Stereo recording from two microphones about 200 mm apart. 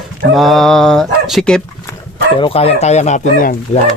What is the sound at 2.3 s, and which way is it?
Speech, 30° left (ahead or behind).